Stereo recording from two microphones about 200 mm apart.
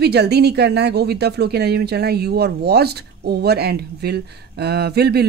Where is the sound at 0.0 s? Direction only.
55° right (ahead or behind).